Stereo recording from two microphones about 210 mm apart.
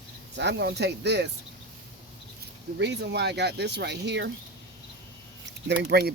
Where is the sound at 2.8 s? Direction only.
55° right (ahead or behind).